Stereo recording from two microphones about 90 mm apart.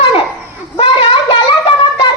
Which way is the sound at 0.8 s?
70° left (ahead or behind).